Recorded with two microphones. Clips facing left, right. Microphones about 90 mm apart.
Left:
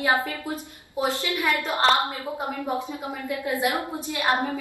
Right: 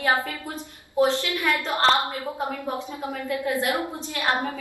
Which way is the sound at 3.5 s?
15° left (ahead or behind).